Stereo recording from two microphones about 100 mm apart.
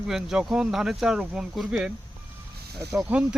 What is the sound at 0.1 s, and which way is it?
Speech, 5° right (ahead or behind).